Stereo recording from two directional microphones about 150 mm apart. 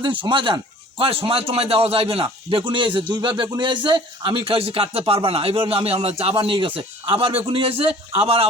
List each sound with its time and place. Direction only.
0.0 s speech: 35° right (ahead or behind)